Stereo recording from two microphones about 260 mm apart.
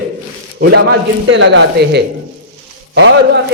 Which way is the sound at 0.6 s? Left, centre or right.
Right.